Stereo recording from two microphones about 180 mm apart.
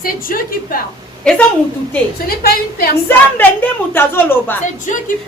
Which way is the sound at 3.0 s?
10° left (ahead or behind).